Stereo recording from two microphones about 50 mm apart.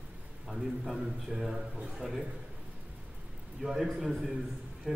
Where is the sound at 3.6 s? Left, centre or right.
Centre.